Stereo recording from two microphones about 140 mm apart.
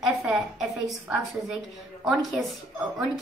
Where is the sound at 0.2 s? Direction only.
Centre (ahead or behind).